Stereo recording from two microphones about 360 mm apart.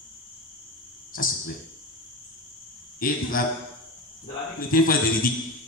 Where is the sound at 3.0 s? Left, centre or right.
Left.